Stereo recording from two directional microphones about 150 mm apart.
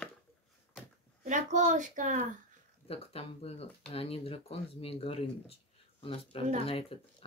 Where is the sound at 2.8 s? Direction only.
40° left (ahead or behind).